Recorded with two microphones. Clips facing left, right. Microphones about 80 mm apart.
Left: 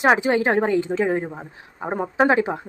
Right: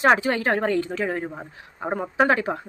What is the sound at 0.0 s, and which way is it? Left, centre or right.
Speech, centre.